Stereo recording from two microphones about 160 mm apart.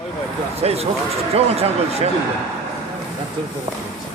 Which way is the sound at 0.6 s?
40° right (ahead or behind).